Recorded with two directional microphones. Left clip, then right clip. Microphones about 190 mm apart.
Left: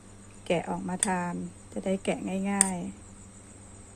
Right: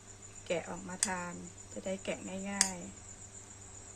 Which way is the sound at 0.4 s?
45° left (ahead or behind).